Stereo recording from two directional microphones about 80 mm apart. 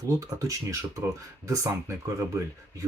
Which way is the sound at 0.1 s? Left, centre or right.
Right.